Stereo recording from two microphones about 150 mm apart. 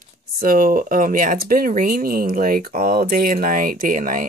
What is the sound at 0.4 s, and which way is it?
Speech, 70° right (ahead or behind).